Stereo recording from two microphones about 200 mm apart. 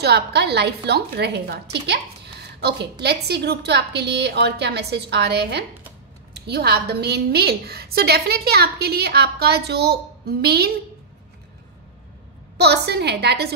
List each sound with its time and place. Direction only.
0.0 s a woman's voice: 55° right (ahead or behind)
12.5 s a woman's voice: 55° right (ahead or behind)